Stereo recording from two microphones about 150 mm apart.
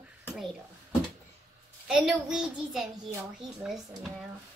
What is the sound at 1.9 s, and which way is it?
A woman's voice, 5° right (ahead or behind).